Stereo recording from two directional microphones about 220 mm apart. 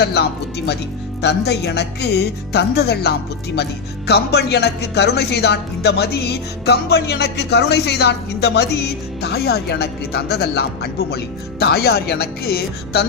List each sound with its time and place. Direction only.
0.0 s speech: 50° left (ahead or behind)